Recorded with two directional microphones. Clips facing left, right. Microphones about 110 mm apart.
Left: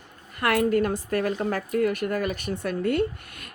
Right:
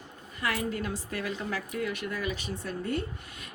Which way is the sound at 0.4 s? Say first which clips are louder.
Left 10 dB; 60° left (ahead or behind).